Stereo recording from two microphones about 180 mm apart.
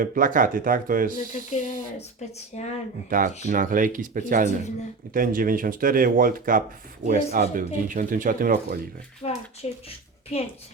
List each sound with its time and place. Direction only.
0.0 s speech: 50° right (ahead or behind)
1.1 s a child's voice: 45° left (ahead or behind)
3.1 s speech: 45° right (ahead or behind)
9.2 s a child's voice: 35° left (ahead or behind)